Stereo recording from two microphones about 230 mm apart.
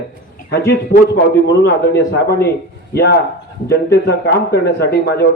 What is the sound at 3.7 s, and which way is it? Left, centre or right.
A man's voice, left.